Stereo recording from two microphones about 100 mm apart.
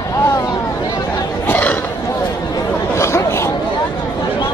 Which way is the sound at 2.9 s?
30° left (ahead or behind).